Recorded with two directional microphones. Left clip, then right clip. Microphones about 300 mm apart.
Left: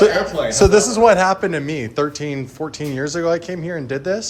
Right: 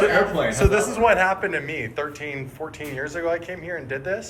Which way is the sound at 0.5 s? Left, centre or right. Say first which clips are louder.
Left 7 dB; centre.